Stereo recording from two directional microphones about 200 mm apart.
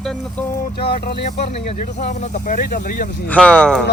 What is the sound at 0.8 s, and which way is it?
Speech, 50° left (ahead or behind).